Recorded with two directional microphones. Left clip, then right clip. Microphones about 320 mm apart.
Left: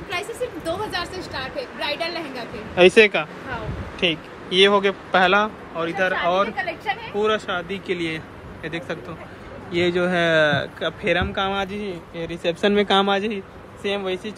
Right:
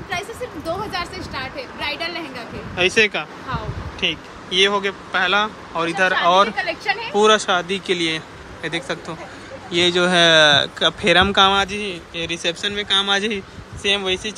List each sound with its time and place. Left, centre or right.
0.9 s a sound: centre
2.7 s speech: centre
6.5 s speech: right
7.2 s speech: centre